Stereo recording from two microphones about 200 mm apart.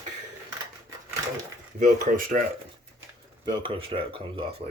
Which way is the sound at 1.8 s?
40° right (ahead or behind).